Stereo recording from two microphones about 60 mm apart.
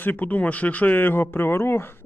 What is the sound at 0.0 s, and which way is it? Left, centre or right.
Speech, left.